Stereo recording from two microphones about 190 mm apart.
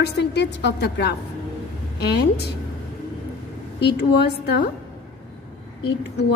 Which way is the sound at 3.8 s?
60° left (ahead or behind).